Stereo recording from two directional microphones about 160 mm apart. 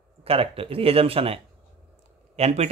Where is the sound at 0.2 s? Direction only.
35° right (ahead or behind).